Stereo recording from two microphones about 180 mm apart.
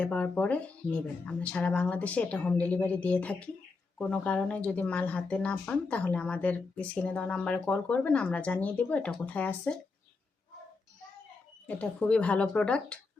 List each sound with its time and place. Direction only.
0.0 s speech: 5° left (ahead or behind)
11.6 s speech: 5° left (ahead or behind)